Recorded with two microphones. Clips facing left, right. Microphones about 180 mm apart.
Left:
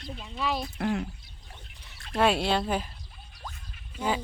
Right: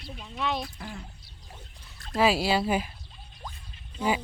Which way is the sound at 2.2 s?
5° right (ahead or behind).